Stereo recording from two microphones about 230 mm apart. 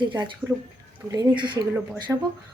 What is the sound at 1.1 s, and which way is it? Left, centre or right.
Speech, centre.